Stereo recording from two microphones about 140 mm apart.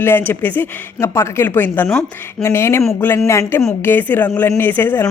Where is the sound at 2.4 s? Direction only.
20° left (ahead or behind).